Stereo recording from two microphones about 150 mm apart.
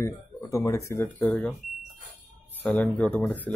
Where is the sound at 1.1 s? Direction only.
Centre (ahead or behind).